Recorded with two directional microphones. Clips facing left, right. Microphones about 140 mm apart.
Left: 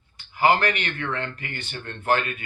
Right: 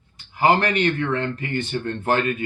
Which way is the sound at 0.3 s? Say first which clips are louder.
Right 2 dB; 25° right (ahead or behind).